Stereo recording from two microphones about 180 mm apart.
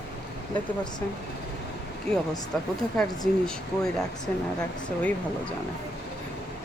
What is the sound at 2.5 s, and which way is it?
Speech, 5° left (ahead or behind).